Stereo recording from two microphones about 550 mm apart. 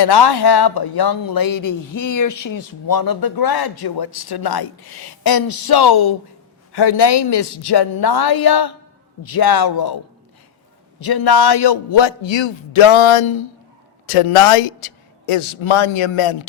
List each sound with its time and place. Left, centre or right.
0.0 s a woman's voice: left
11.0 s a man's voice: left